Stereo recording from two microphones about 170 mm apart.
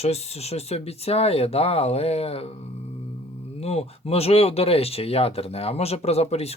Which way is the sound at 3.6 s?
40° left (ahead or behind).